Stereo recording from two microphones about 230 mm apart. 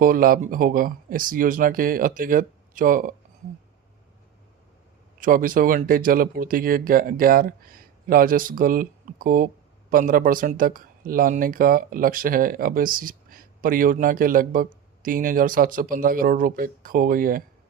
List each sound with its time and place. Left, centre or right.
0.0 s speech: right
5.2 s speech: right